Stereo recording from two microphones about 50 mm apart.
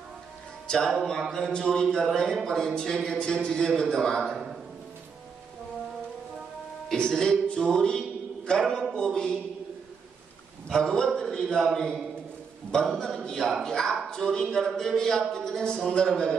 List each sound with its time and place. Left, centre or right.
0.7 s speech: centre
7.0 s speech: centre
10.7 s a man's voice: centre